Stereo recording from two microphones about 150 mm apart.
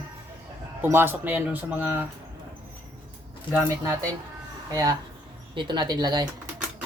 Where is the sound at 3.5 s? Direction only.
20° right (ahead or behind).